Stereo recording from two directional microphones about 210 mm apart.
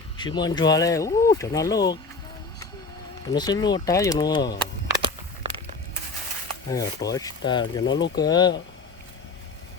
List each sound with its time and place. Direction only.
0.2 s speech: 20° left (ahead or behind)
3.2 s speech: 20° left (ahead or behind)
4.9 s a sound: 25° right (ahead or behind)
6.7 s speech: 15° left (ahead or behind)
7.9 s speech: 60° left (ahead or behind)
8.3 s speech: 20° left (ahead or behind)